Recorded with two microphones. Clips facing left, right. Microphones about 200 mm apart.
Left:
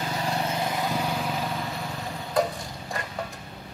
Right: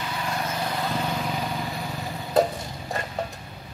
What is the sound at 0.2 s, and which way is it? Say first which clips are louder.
Vehicle: left 1 dB; 30° left (ahead or behind).